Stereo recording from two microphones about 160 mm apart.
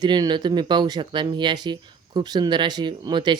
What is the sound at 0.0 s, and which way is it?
Speech, 25° right (ahead or behind).